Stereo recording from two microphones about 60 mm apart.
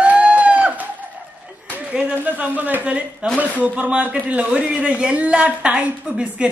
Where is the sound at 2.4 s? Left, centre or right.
Right.